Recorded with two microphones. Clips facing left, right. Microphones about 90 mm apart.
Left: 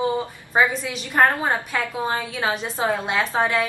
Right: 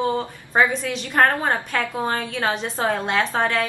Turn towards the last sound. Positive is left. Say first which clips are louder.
# even
turn(degrees=10)  # may be behind; listen again after turning